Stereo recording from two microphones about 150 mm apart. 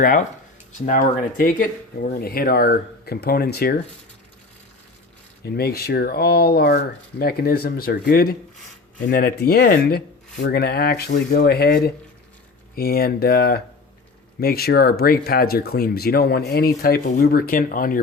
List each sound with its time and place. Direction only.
0.0 s speech: 65° left (ahead or behind); by 3.8 s 90° left
5.5 s speech: 90° left
17.1 s speech: 75° left (ahead or behind)